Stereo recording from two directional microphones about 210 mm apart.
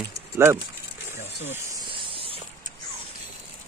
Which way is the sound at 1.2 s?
30° left (ahead or behind).